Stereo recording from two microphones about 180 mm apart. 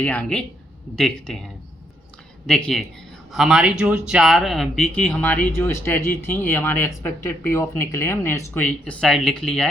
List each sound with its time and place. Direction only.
0.0 s speech: 5° left (ahead or behind)
2.5 s speech: 5° left (ahead or behind)